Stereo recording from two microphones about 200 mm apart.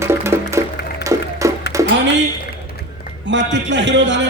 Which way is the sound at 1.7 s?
15° right (ahead or behind).